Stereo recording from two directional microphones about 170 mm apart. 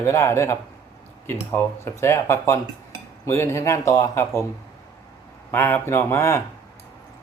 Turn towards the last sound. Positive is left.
turn(degrees=15)  # may be behind; listen again after turning